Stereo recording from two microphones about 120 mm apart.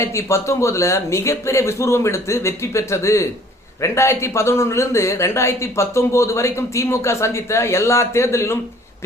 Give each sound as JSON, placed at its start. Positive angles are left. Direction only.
{"t": 0.0, "sound": "speech", "side_deg": 25}